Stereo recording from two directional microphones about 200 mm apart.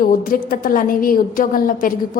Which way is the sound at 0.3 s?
45° left (ahead or behind).